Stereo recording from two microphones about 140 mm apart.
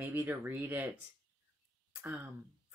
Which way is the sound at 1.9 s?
10° right (ahead or behind).